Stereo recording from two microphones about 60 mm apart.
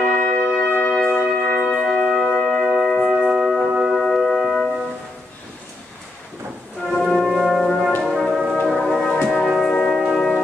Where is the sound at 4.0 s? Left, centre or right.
Centre.